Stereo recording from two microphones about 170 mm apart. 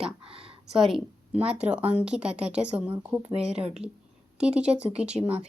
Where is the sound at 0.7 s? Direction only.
Centre (ahead or behind).